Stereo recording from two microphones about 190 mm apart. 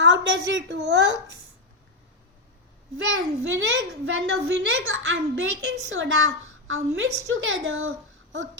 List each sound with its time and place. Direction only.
0.0 s a woman's voice: 70° right (ahead or behind)
3.0 s a child's voice: 80° right